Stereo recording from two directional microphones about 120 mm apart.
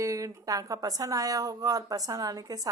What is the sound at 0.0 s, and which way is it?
Speech, 25° right (ahead or behind).